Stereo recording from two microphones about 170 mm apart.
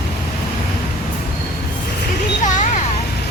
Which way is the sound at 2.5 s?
45° left (ahead or behind).